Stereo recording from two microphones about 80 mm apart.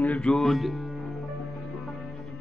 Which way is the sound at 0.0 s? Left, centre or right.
Centre.